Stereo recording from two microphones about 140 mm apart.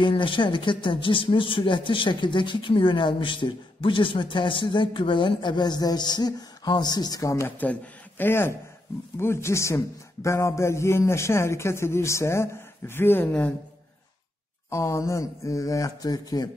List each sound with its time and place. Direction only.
0.0 s a man's voice: 35° left (ahead or behind); by 13.5 s 10° left (ahead or behind)
14.7 s a man's voice: 20° left (ahead or behind)